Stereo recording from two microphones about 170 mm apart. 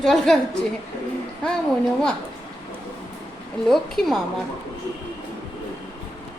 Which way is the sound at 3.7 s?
Centre (ahead or behind).